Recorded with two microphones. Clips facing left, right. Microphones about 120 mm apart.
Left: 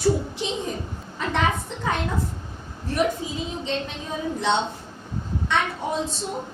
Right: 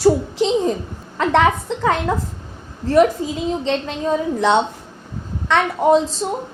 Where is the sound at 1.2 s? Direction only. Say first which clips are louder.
Right 8 dB; 90° right.